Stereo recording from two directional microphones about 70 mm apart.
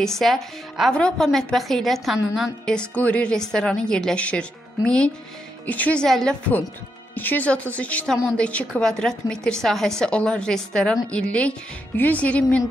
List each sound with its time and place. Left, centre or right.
0.0 s a woman's voice: centre
2.6 s a woman's voice: centre
6.0 s a woman's voice: centre
7.2 s a woman's voice: left